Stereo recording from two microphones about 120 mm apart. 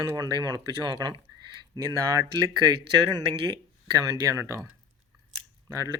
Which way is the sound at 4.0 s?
30° right (ahead or behind).